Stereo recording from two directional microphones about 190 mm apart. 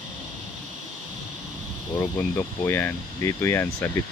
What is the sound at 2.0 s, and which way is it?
Speech, 10° left (ahead or behind).